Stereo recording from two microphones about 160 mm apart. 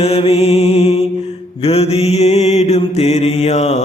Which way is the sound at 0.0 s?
40° left (ahead or behind).